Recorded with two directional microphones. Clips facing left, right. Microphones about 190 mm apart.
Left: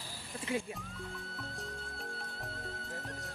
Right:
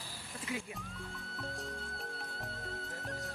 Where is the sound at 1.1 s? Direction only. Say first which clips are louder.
Right 1 dB; centre (ahead or behind).